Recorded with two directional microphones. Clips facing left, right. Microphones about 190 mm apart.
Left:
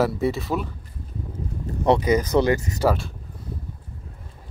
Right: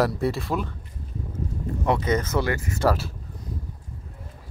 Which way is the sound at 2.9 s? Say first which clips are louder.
Left 1 dB; 5° right (ahead or behind).